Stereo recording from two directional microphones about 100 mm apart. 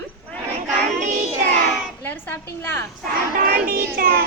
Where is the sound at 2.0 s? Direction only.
20° left (ahead or behind).